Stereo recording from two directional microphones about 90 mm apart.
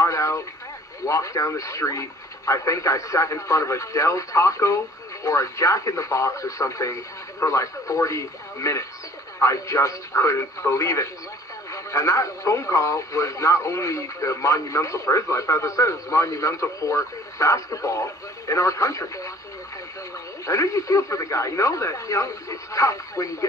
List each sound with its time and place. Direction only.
0.0 s vehicle: 35° left (ahead or behind)
1.0 s speech: 35° left (ahead or behind)
20.4 s speech: 35° left (ahead or behind)